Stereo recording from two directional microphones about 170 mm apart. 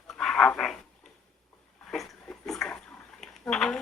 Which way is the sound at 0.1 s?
Centre (ahead or behind).